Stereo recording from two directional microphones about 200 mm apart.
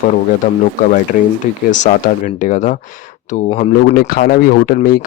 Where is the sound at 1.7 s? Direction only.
40° left (ahead or behind).